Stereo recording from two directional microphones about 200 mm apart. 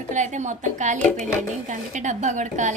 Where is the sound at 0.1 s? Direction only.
35° right (ahead or behind).